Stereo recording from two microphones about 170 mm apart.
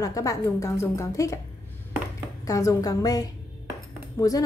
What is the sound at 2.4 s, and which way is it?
A woman's voice, 20° left (ahead or behind).